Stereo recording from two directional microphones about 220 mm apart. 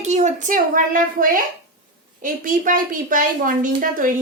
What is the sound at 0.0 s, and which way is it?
A woman's voice, 30° right (ahead or behind).